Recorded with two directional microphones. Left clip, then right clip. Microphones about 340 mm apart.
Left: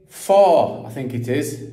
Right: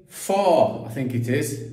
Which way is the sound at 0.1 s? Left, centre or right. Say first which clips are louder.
Left 6 dB; centre.